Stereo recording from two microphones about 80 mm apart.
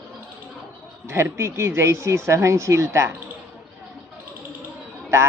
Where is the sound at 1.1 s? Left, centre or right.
Right.